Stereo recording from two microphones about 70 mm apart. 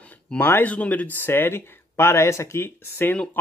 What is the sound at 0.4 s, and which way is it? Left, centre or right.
Speech, left.